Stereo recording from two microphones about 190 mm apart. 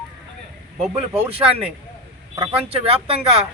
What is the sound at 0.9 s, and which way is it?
Speech, 30° right (ahead or behind).